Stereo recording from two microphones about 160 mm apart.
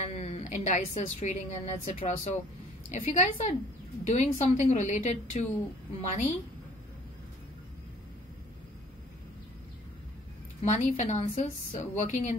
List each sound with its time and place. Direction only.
0.0 s a woman's voice: 45° left (ahead or behind)
10.6 s a woman's voice: 45° left (ahead or behind)